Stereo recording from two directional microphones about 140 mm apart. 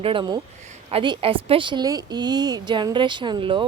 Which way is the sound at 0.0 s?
35° right (ahead or behind).